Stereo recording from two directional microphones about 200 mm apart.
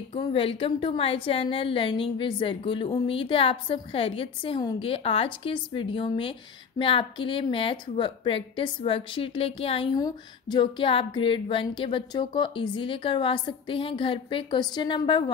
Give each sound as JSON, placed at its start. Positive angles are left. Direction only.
{"t": 0.1, "sound": "a woman's voice", "side_deg": 25}